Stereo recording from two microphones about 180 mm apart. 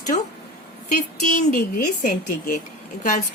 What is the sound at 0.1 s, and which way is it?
Speech, 40° left (ahead or behind).